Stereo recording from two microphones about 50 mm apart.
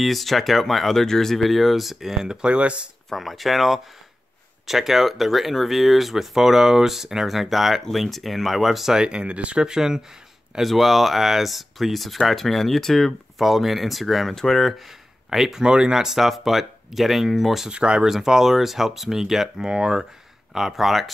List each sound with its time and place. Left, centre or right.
0.0 s speech: centre; by 2.9 s right
3.1 s speech: centre
8.9 s speech: centre
10.6 s speech: centre
15.6 s speech: centre
17.6 s speech: centre
18.0 s speech: centre
20.5 s speech: centre